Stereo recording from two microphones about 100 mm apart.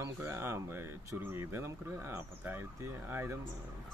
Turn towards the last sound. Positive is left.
turn(degrees=-25)  # may be behind; listen again after turning